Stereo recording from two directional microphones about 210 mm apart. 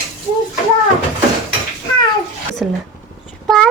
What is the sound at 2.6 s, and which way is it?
Speech, 5° right (ahead or behind).